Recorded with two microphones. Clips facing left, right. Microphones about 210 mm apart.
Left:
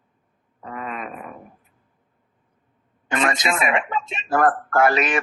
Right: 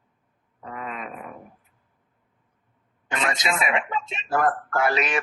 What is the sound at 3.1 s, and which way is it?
Speech, 50° left (ahead or behind).